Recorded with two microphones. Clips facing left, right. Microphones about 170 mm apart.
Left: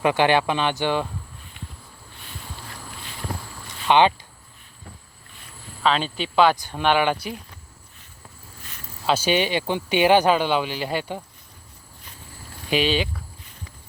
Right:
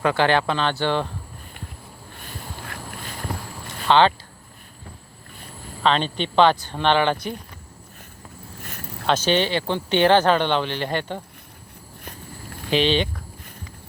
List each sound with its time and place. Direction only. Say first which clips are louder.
0.0 s speech: left 1 dB; 15° left (ahead or behind)
2.1 s a sound: right 3 dB; 50° right (ahead or behind)
3.8 s speech: even; 15° left (ahead or behind)
5.8 s speech: right 1 dB; 5° left (ahead or behind)
8.6 s a sound: right 7 dB; 55° right (ahead or behind)
9.0 s speech: right 1 dB; 10° left (ahead or behind)
12.7 s speech: right 2 dB; 10° left (ahead or behind)